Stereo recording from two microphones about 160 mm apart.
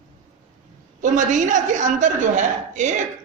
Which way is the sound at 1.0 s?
50° right (ahead or behind).